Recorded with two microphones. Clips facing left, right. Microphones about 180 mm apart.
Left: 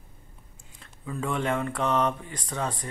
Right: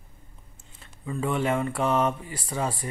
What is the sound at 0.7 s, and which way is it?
Speech, 5° right (ahead or behind).